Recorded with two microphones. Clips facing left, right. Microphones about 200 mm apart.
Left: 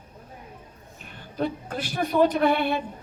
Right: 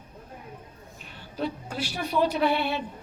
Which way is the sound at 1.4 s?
50° left (ahead or behind).